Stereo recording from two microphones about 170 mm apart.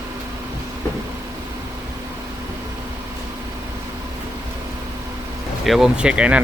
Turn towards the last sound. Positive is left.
turn(degrees=-5)  # may be behind; listen again after turning